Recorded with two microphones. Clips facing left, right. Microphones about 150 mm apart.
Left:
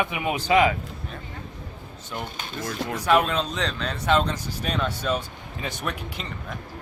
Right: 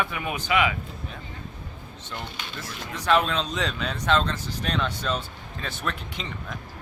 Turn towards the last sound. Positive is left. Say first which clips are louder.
# left 1 dB
turn(degrees=15)  # may be behind; listen again after turning